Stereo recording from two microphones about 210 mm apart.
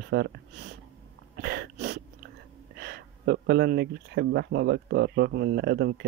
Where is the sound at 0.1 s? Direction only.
50° right (ahead or behind).